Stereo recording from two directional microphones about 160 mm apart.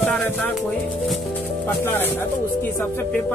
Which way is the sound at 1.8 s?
15° left (ahead or behind).